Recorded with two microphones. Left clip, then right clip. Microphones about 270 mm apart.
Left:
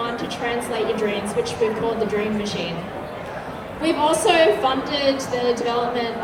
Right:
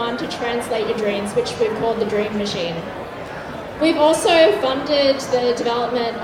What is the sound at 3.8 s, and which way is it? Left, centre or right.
A woman's voice, right.